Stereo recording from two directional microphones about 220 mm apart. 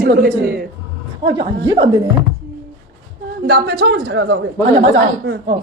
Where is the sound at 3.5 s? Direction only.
45° right (ahead or behind).